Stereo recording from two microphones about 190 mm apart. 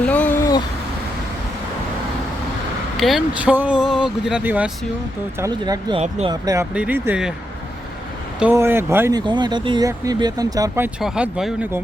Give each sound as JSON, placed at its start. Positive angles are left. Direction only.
{"t": 0.0, "sound": "vehicle", "side_deg": 5}
{"t": 3.0, "sound": "speech", "side_deg": 0}
{"t": 5.4, "sound": "speech", "side_deg": -20}
{"t": 6.0, "sound": "speech", "side_deg": -35}
{"t": 6.3, "sound": "speech", "side_deg": -20}
{"t": 8.4, "sound": "speech", "side_deg": -10}